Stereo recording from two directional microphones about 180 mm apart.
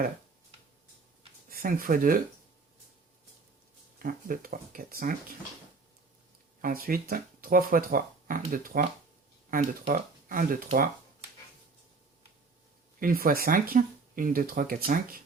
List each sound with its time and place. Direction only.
1.5 s speech: 55° right (ahead or behind)
3.9 s speech: 50° right (ahead or behind)
6.6 s speech: 50° right (ahead or behind)
13.0 s speech: 50° right (ahead or behind)